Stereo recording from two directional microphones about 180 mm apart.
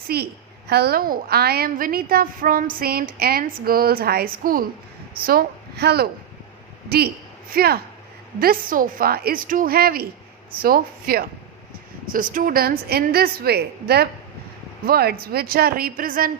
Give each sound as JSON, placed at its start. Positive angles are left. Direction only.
{"t": 0.1, "sound": "a woman's voice", "side_deg": -60}